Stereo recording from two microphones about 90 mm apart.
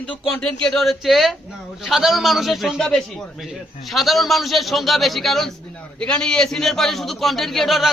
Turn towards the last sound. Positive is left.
turn(degrees=0)  # may be behind; listen again after turning